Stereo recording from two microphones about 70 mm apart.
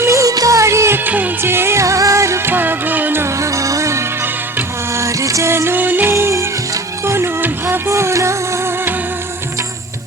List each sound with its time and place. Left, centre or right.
0.0 s music: right
0.9 s music: right
2.5 s music: right
3.2 s music: right
6.1 s music: right